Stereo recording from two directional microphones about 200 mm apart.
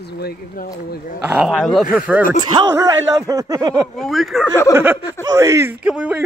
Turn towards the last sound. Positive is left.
turn(degrees=-5)  # may be behind; listen again after turning